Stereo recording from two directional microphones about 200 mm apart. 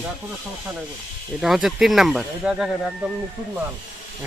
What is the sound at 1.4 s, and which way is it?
Speech, centre (ahead or behind).